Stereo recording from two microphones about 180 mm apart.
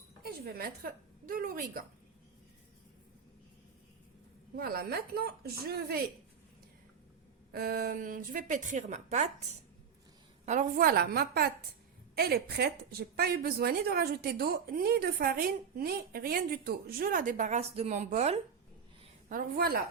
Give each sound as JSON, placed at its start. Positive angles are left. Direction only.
{"t": 0.2, "sound": "a woman's voice", "side_deg": -60}
{"t": 4.5, "sound": "a woman's voice", "side_deg": -55}
{"t": 7.5, "sound": "a woman's voice", "side_deg": -55}
{"t": 10.4, "sound": "a woman's voice", "side_deg": -45}
{"t": 19.3, "sound": "a woman's voice", "side_deg": -55}